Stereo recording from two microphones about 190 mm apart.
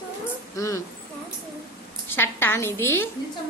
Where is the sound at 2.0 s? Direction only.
10° left (ahead or behind).